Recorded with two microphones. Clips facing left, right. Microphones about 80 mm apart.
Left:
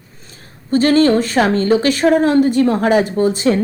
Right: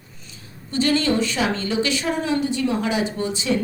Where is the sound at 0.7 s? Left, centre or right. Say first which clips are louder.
Left 8 dB; left.